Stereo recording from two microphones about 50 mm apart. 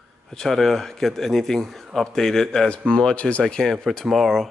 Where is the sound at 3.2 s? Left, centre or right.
Left.